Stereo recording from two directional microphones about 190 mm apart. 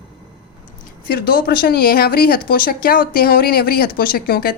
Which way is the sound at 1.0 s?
55° left (ahead or behind).